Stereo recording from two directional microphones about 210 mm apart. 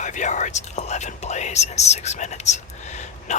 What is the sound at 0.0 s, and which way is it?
Speech, 35° left (ahead or behind).